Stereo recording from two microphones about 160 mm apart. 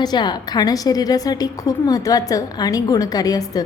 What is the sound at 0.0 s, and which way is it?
A woman's voice, 25° left (ahead or behind).